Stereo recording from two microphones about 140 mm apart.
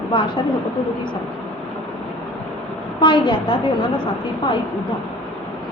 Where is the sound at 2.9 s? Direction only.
35° left (ahead or behind).